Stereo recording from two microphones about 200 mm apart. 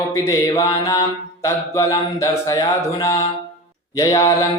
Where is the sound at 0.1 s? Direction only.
15° left (ahead or behind).